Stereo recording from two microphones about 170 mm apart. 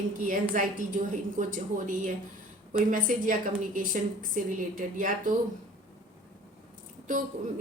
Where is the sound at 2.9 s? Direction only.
50° right (ahead or behind).